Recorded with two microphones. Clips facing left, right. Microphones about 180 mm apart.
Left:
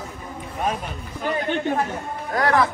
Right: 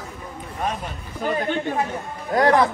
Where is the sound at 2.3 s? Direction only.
20° right (ahead or behind).